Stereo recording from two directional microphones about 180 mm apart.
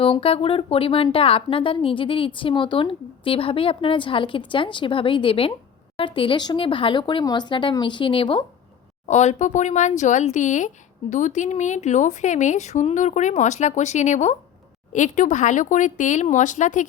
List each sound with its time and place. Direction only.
0.0 s a woman's voice: 30° left (ahead or behind)
9.0 s speech: 40° left (ahead or behind)